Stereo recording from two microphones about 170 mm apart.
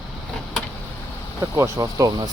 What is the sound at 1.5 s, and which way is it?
Speech, 20° right (ahead or behind).